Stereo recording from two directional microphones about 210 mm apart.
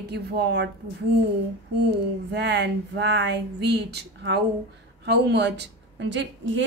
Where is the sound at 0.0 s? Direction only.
50° right (ahead or behind).